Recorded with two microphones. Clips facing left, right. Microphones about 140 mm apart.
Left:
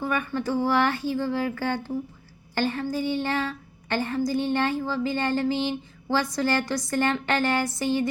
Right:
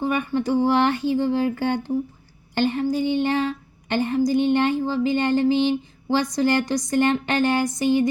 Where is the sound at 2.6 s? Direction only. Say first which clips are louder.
Right 5 dB; 20° right (ahead or behind).